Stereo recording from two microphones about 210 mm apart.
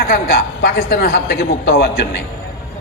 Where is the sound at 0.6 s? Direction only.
50° left (ahead or behind).